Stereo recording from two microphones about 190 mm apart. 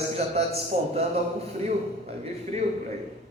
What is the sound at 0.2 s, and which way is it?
Speech, 35° right (ahead or behind).